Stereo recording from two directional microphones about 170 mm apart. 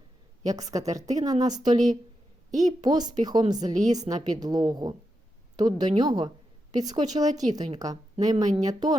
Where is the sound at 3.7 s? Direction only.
45° right (ahead or behind).